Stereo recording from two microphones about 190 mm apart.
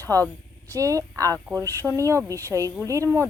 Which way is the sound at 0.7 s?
15° right (ahead or behind).